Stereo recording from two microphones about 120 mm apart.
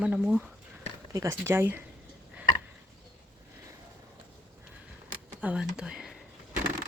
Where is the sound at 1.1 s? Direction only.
25° right (ahead or behind).